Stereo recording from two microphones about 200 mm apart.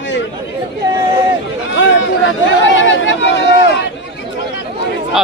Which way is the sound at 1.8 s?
70° left (ahead or behind).